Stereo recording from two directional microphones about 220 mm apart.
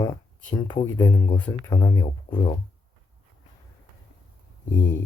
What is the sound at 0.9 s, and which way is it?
Speech, 10° left (ahead or behind).